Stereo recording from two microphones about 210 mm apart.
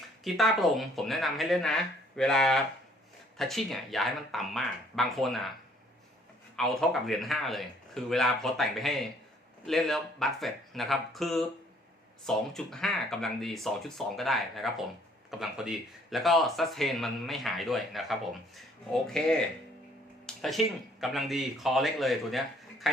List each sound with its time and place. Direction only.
0.3 s speech: centre (ahead or behind)
6.6 s speech: centre (ahead or behind)